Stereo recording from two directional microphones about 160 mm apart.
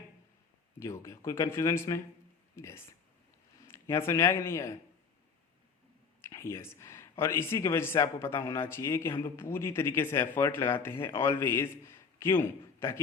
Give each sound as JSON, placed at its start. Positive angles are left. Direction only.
{"t": 0.8, "sound": "speech", "side_deg": 15}
{"t": 6.2, "sound": "speech", "side_deg": 15}